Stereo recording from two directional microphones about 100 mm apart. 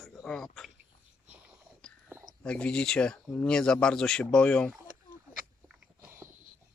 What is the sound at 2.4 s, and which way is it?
Speech, 10° left (ahead or behind).